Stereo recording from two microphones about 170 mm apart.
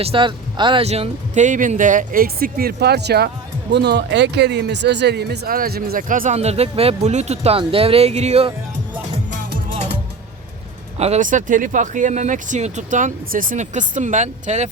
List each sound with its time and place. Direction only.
0.0 s speech: 30° right (ahead or behind); by 3.2 s 75° right (ahead or behind)
3.7 s speech: 90° right; by 8.5 s 35° right (ahead or behind)
10.9 s speech: 40° right (ahead or behind)